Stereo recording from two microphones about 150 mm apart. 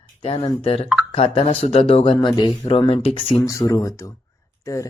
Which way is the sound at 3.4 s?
20° left (ahead or behind).